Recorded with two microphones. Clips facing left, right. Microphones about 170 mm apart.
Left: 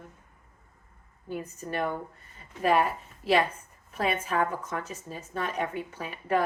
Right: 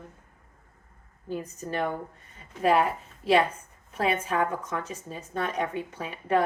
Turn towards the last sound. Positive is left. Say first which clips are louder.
# right 2 dB
turn(degrees=-30)  # may be behind; listen again after turning